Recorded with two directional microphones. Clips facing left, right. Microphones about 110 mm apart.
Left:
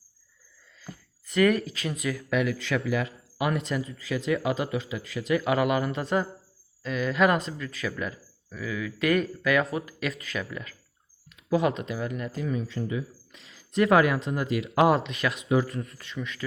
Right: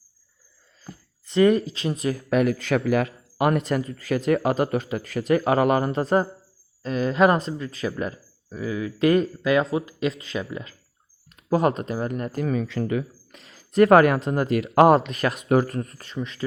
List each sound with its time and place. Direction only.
1.3 s speech: 25° right (ahead or behind)
11.5 s speech: 45° right (ahead or behind); by 13.4 s 65° right (ahead or behind)
13.4 s speech: 45° right (ahead or behind)